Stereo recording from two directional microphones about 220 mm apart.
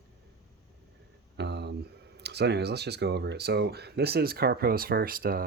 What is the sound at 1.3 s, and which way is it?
Speech, 50° right (ahead or behind).